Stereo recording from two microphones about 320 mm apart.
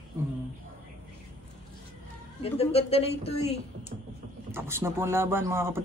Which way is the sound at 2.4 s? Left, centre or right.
Centre.